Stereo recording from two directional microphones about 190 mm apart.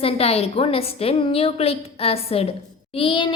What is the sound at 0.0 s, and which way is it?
A woman's voice, 30° left (ahead or behind).